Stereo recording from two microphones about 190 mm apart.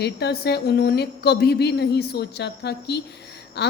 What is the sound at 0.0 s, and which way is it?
A woman's voice, 60° left (ahead or behind).